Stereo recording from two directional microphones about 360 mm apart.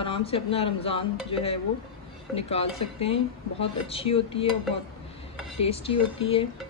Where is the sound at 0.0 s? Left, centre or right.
Centre.